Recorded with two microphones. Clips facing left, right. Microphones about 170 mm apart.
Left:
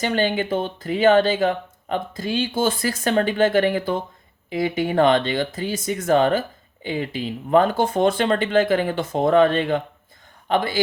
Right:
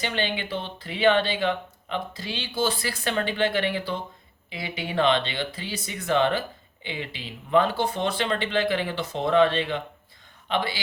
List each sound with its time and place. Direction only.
0.0 s speech: 45° left (ahead or behind)